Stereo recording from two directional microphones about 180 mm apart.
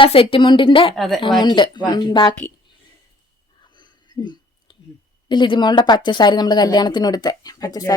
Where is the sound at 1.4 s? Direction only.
25° left (ahead or behind).